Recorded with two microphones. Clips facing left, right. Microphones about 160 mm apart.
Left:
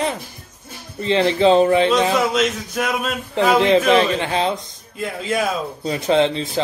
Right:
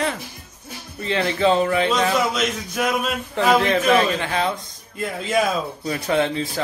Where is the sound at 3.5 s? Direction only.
20° left (ahead or behind).